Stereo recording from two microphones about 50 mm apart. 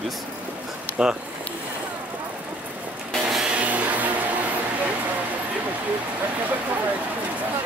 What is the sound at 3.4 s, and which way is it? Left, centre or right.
Music, right.